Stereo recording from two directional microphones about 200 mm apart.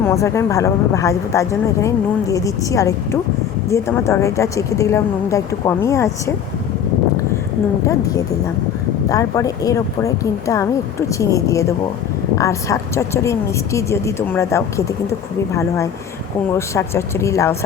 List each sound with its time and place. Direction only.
0.0 s speech: 15° left (ahead or behind)
7.9 s speech: 15° left (ahead or behind)